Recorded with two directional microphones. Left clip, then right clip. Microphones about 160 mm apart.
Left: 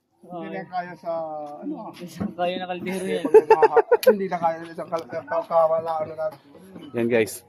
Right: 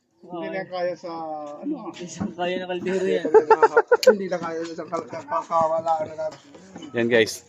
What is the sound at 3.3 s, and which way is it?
Speech, 45° left (ahead or behind).